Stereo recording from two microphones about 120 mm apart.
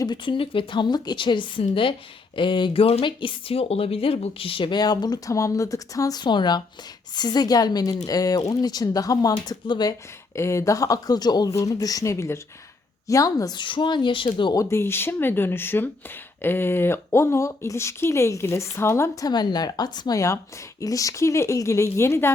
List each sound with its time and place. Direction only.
0.0 s a woman's voice: 40° left (ahead or behind)
10.3 s speech: 25° left (ahead or behind); by 14.5 s 40° left (ahead or behind)
14.5 s speech: 25° left (ahead or behind)
19.3 s speech: 35° left (ahead or behind)